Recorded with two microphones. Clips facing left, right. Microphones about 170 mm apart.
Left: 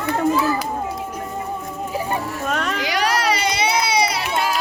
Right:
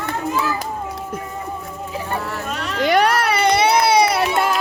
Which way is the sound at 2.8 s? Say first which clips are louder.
Right 7 dB; 55° right (ahead or behind).